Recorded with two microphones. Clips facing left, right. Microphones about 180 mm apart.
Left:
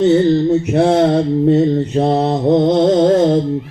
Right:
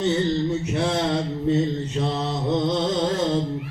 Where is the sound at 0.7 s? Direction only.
55° left (ahead or behind).